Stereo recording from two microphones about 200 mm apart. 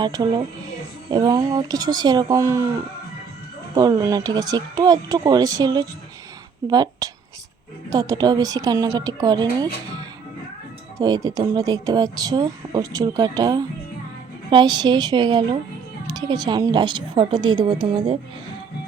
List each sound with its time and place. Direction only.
0.0 s speech: 20° right (ahead or behind)
3.8 s speech: 20° right (ahead or behind)